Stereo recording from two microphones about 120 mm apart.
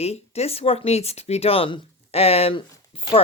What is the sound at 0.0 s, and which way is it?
Speech, 60° left (ahead or behind).